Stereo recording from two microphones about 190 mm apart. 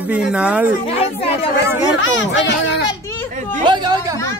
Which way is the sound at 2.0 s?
85° left.